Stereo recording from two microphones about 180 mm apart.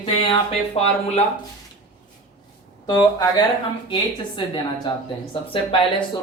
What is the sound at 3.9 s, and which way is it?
Speech, 25° left (ahead or behind).